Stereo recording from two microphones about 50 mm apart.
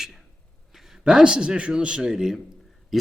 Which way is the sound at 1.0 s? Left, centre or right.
Centre.